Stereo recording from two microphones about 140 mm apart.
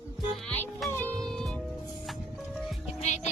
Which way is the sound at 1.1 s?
5° left (ahead or behind).